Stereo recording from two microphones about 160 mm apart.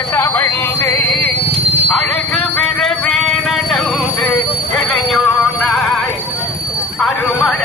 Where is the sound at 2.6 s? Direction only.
5° left (ahead or behind).